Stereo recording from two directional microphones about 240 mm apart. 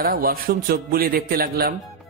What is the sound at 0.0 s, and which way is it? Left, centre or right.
A man's voice, right.